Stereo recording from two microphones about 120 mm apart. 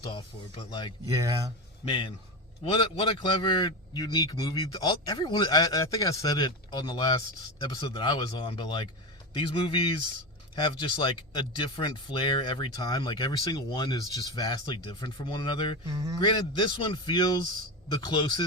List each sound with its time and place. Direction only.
0.1 s a man's voice: 45° left (ahead or behind)
1.1 s speech: 30° right (ahead or behind)
1.8 s a man's voice: 45° left (ahead or behind)
15.9 s speech: 30° right (ahead or behind)
16.2 s a man's voice: 45° left (ahead or behind)